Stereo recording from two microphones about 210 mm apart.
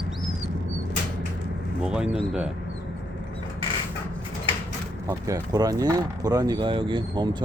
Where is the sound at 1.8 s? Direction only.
5° right (ahead or behind).